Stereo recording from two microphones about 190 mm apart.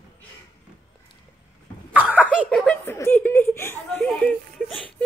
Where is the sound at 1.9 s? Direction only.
10° right (ahead or behind).